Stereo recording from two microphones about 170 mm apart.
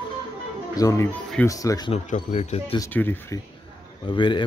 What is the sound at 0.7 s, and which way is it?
A man's voice, 20° left (ahead or behind).